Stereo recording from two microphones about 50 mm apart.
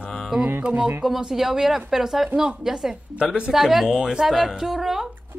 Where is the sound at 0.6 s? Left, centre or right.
Right.